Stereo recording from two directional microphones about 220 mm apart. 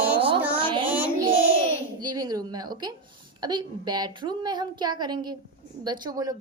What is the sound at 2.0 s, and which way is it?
A woman's voice, 20° right (ahead or behind).